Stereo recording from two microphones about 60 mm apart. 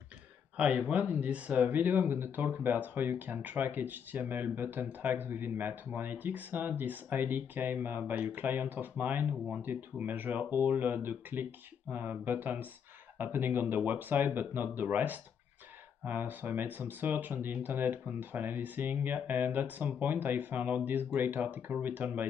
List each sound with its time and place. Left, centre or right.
0.6 s speech: centre